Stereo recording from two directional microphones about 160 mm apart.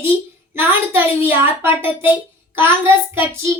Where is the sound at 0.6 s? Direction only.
15° right (ahead or behind).